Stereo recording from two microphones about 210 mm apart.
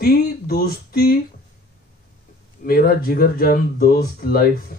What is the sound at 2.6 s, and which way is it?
Speech, 45° left (ahead or behind).